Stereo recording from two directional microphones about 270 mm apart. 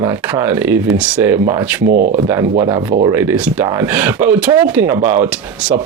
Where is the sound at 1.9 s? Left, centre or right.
Right.